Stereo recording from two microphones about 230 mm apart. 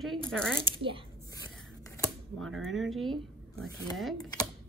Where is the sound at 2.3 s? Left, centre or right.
Centre.